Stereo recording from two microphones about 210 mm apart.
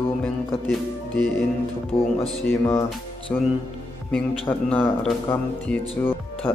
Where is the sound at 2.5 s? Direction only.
10° left (ahead or behind).